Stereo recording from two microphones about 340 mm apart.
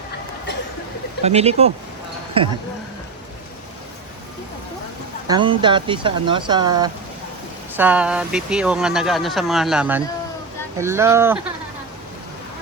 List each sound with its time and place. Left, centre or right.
1.2 s speech: centre
5.3 s speech: centre